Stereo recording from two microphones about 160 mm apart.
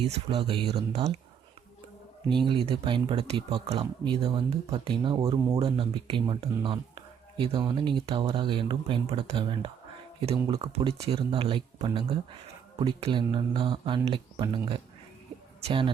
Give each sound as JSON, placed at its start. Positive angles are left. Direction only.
{"t": 0.0, "sound": "speech", "side_deg": -40}
{"t": 2.3, "sound": "speech", "side_deg": -30}